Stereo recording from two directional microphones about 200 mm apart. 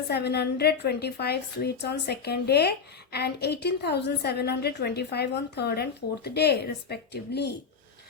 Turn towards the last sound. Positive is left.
turn(degrees=55)  # may be behind; listen again after turning